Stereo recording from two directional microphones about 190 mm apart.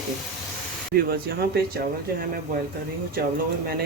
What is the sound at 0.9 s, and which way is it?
Speech, 50° right (ahead or behind).